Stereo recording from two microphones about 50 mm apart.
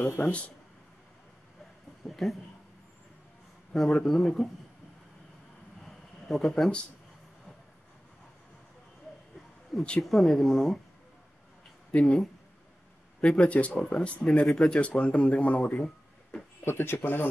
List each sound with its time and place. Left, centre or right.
0.2 s speech: left
2.0 s speech: centre
3.7 s speech: centre
5.8 s a sound: centre
9.7 s speech: centre
11.9 s speech: left
13.4 s speech: left
14.4 s speech: centre
14.8 s speech: left
15.8 s a sound: centre
16.6 s speech: left